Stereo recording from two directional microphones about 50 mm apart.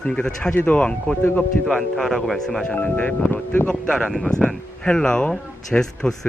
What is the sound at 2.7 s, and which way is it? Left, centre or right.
Speech, left.